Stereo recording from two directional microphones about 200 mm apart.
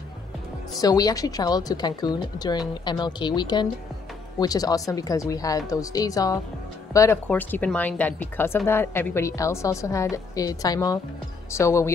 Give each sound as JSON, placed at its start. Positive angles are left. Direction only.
{"t": 0.7, "sound": "a woman's voice", "side_deg": 20}